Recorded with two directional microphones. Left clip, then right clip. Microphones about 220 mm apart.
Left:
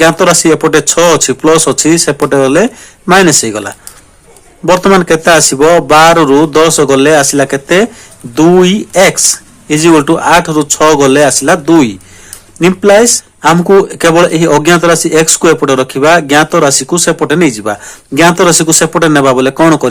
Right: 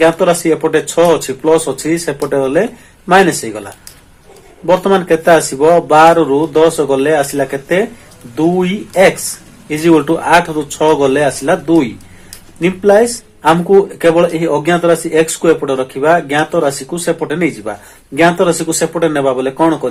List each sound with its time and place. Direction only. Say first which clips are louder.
0.0 s speech: left 4 dB; 30° left (ahead or behind)